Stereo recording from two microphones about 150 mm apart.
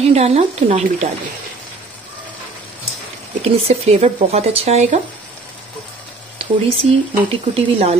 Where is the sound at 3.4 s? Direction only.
40° right (ahead or behind).